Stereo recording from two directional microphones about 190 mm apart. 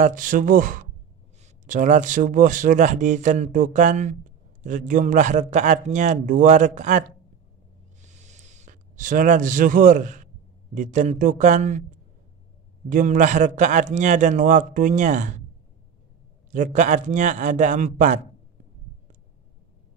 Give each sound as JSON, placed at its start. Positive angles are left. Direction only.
{"t": 0.0, "sound": "speech", "side_deg": -45}
{"t": 8.1, "sound": "a sound", "side_deg": -40}
{"t": 10.7, "sound": "speech", "side_deg": -40}
{"t": 12.9, "sound": "speech", "side_deg": -40}
{"t": 16.5, "sound": "speech", "side_deg": -40}